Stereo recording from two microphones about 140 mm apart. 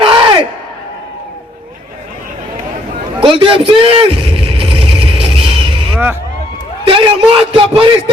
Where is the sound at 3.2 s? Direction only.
40° right (ahead or behind).